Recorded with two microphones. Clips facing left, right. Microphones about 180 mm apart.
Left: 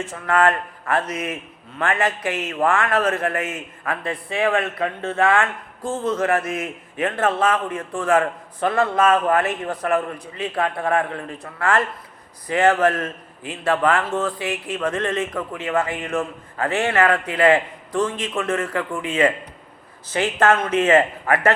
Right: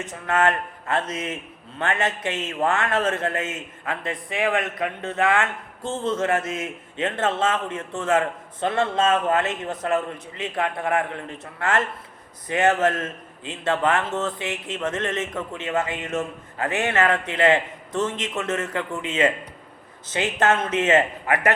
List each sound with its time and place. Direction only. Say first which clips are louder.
0.0 s a man's voice: left 3 dB; 20° right (ahead or behind)